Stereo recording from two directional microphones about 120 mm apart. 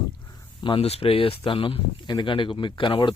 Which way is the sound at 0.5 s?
45° left (ahead or behind).